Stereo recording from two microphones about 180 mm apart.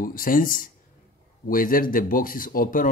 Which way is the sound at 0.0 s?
50° left (ahead or behind).